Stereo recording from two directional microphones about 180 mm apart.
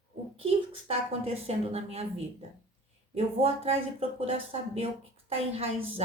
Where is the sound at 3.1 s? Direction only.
35° right (ahead or behind).